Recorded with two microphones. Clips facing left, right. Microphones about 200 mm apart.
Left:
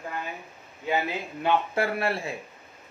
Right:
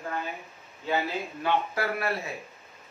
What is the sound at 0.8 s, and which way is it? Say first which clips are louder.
A man's voice: left 1 dB; 20° left (ahead or behind).